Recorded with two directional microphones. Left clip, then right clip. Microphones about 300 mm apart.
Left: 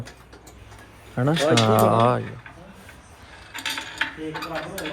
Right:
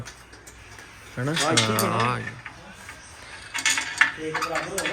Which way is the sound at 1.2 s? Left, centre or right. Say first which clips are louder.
Left 3 dB; centre.